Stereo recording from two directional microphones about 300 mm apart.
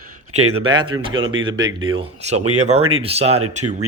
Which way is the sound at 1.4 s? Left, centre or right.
Centre.